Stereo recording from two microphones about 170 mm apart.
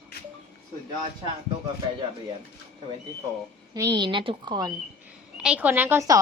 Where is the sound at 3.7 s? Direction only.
25° right (ahead or behind).